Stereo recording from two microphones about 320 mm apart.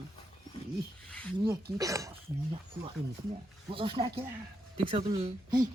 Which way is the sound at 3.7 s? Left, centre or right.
Centre.